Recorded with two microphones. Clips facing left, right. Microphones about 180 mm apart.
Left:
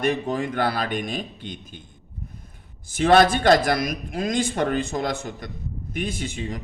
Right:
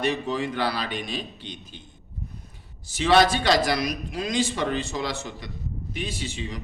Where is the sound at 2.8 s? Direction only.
50° left (ahead or behind).